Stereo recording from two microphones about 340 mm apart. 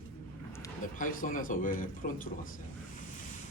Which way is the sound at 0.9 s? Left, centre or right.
Left.